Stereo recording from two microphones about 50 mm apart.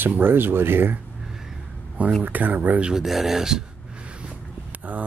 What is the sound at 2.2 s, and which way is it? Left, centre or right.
Speech, right.